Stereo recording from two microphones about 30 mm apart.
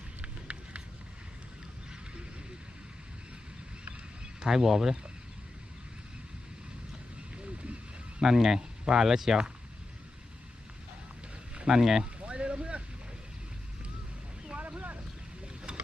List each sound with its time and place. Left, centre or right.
0.2 s run: right
4.4 s speech: centre
8.2 s speech: centre
11.7 s speech: centre
12.2 s a sound: right
14.5 s vehicle: right